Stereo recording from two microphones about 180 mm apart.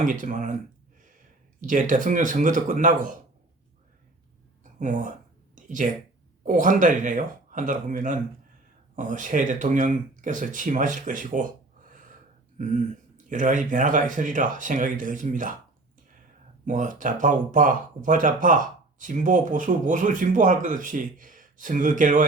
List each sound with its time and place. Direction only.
0.0 s speech: 45° right (ahead or behind)
1.6 s speech: 45° right (ahead or behind)
4.8 s speech: 45° right (ahead or behind)
5.5 s a sound: 45° right (ahead or behind)
6.4 s speech: 45° right (ahead or behind)
16.6 s speech: 45° right (ahead or behind)